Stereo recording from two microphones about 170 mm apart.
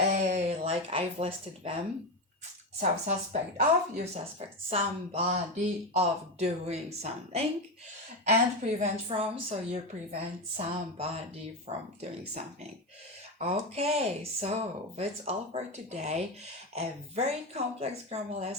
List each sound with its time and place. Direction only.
0.0 s a sound: 40° right (ahead or behind)
3.1 s a woman's voice: 40° right (ahead or behind)
13.4 s speech: 40° right (ahead or behind)